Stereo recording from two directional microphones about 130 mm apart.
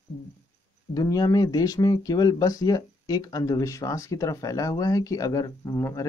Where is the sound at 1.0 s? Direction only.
30° left (ahead or behind).